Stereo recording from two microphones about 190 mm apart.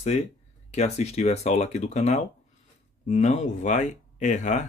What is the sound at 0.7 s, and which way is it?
Speech, 35° left (ahead or behind).